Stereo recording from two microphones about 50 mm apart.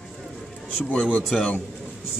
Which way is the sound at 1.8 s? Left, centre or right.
Centre.